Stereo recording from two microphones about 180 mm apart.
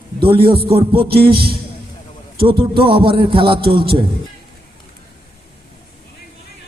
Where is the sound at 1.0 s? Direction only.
60° right (ahead or behind).